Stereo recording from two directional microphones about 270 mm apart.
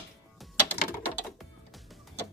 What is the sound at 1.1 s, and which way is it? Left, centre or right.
Music, centre.